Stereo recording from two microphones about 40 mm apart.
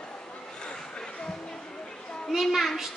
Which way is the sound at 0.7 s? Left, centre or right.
Left.